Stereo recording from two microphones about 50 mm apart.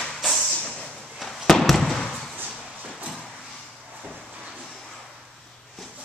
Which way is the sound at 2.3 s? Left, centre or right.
Right.